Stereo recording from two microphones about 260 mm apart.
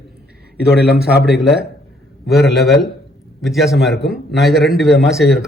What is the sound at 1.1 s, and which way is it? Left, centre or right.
A man's voice, centre.